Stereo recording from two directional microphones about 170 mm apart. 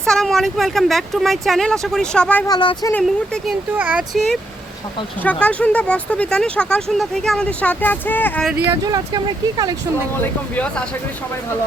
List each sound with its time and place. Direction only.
0.0 s speech: centre (ahead or behind)
2.5 s speech: 25° left (ahead or behind)
2.9 s speech: centre (ahead or behind)
8.7 s speech: 20° right (ahead or behind)
10.2 s speech: 10° left (ahead or behind)